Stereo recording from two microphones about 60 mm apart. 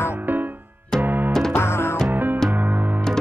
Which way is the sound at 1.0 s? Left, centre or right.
Right.